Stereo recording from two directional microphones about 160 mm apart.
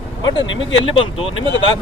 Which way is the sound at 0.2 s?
25° left (ahead or behind).